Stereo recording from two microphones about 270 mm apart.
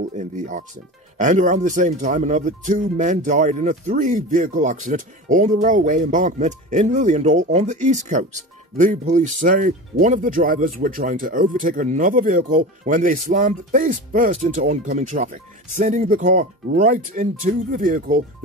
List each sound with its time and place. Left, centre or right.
0.1 s speech: right